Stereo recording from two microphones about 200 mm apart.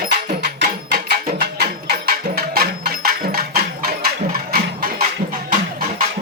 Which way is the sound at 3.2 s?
50° right (ahead or behind).